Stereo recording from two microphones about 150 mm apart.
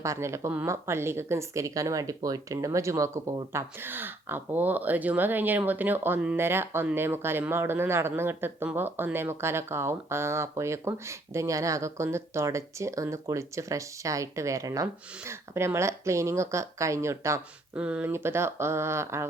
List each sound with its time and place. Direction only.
0.0 s speech: 20° right (ahead or behind)
17.7 s speech: 5° right (ahead or behind)